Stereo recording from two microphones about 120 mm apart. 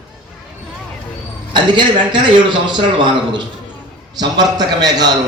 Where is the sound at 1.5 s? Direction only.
40° right (ahead or behind).